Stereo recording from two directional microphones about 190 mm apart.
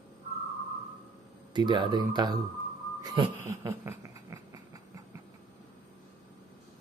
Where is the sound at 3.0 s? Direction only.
20° right (ahead or behind).